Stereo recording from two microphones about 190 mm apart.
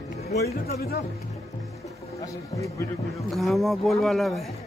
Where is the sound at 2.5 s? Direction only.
15° left (ahead or behind).